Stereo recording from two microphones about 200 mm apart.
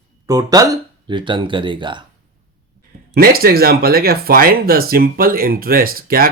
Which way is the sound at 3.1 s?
50° right (ahead or behind).